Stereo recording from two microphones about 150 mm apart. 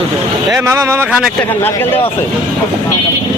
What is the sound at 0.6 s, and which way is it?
Speech, 20° right (ahead or behind).